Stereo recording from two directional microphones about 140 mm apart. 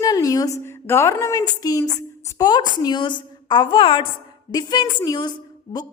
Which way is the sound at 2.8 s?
30° left (ahead or behind).